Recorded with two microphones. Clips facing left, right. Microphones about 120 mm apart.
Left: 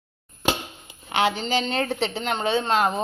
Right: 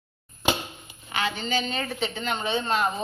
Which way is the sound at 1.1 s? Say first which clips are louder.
Left 5 dB; 85° left.